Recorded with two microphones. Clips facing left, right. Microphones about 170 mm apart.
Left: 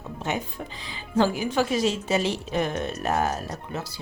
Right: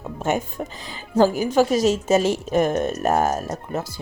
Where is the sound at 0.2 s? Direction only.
45° right (ahead or behind).